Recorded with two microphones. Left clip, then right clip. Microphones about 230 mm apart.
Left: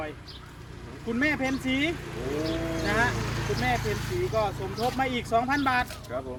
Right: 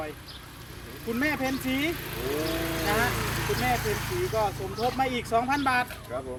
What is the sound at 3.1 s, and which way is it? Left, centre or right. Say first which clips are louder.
Speech: right 2 dB; right.